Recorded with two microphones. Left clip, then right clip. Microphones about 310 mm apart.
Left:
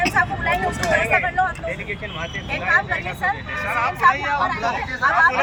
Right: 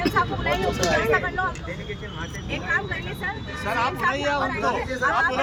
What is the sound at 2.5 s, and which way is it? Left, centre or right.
Speech, centre.